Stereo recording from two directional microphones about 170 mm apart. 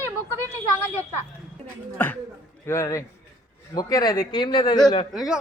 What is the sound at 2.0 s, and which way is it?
Speech, 10° left (ahead or behind).